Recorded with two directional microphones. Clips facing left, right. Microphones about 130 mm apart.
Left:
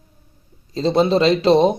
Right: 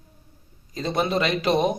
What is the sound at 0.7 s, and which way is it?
A man's voice, 30° left (ahead or behind).